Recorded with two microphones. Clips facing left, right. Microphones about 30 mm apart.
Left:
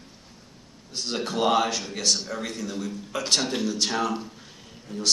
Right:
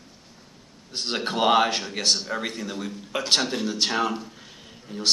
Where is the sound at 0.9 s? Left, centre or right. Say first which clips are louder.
Right 1 dB; right.